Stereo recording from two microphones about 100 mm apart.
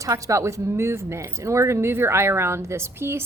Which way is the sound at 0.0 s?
30° right (ahead or behind).